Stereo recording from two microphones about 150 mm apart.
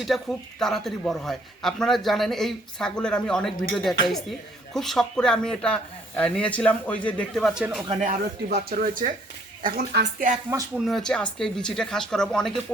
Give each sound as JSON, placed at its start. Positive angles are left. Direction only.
{"t": 0.0, "sound": "speech", "side_deg": 0}
{"t": 7.9, "sound": "speech", "side_deg": -50}
{"t": 8.4, "sound": "speech", "side_deg": -80}
{"t": 9.6, "sound": "speech", "side_deg": -85}
{"t": 10.8, "sound": "speech", "side_deg": 0}